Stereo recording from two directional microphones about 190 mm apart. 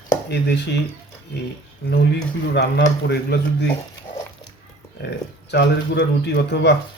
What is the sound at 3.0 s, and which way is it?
Speech, 60° left (ahead or behind).